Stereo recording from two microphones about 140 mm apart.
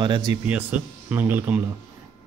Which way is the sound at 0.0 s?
30° right (ahead or behind).